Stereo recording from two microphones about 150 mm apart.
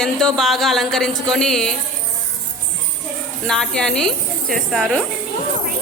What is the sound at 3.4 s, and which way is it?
Speech, 5° left (ahead or behind).